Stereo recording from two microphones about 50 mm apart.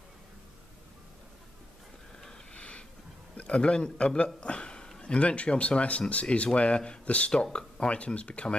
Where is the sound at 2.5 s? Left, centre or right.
Left.